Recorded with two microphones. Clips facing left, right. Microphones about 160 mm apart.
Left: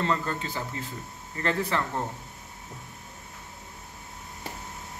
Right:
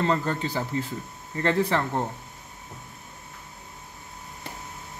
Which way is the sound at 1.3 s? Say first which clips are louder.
Right 4 dB; 30° right (ahead or behind).